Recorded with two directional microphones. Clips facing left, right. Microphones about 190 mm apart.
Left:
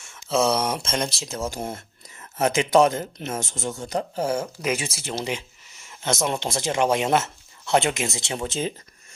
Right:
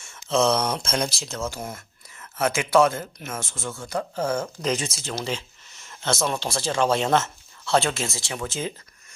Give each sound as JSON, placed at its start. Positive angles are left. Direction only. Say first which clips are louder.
{"t": 0.0, "sound": "speech", "louder": "even", "side_deg": 5}
{"t": 1.5, "sound": "speech", "louder": "left 3 dB", "side_deg": 20}